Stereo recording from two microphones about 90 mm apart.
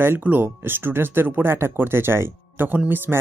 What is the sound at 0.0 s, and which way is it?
Speech, 25° right (ahead or behind).